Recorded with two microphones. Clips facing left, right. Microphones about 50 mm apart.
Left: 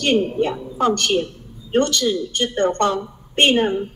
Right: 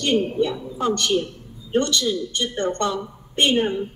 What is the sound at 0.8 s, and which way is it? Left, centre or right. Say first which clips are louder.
A woman's voice: left 3 dB; left.